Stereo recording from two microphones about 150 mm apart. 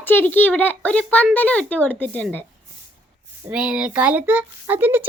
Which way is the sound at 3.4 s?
5° right (ahead or behind).